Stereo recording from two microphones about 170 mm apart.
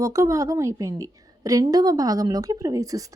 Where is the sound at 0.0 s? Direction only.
20° right (ahead or behind).